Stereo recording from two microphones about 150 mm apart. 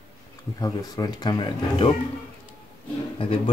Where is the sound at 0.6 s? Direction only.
25° left (ahead or behind).